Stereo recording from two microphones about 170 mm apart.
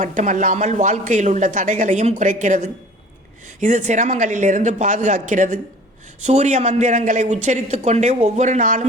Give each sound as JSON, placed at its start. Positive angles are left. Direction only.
{"t": 0.0, "sound": "speech", "side_deg": -50}